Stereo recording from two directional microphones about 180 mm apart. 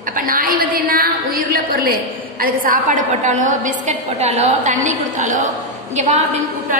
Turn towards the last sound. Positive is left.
turn(degrees=-40)  # may be behind; listen again after turning